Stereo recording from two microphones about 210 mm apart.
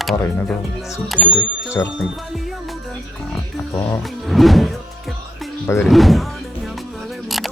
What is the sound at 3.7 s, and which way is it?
Speech, 20° left (ahead or behind).